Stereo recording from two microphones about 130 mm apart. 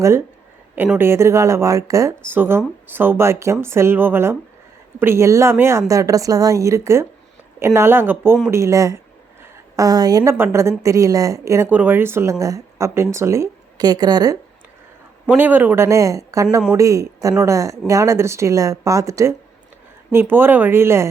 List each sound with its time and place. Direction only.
0.9 s speech: 20° right (ahead or behind)
9.4 s a sound: 25° right (ahead or behind)
10.3 s speech: 20° right (ahead or behind)
15.4 s speech: 15° right (ahead or behind)